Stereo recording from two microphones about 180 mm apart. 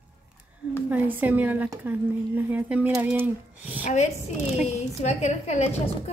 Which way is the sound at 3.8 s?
40° left (ahead or behind).